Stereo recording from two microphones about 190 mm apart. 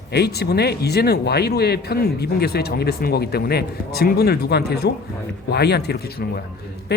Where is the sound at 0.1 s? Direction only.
60° left (ahead or behind).